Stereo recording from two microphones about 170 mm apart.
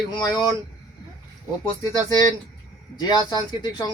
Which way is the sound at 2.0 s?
25° left (ahead or behind).